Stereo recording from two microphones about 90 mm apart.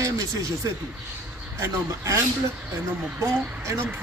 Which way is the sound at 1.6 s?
35° right (ahead or behind).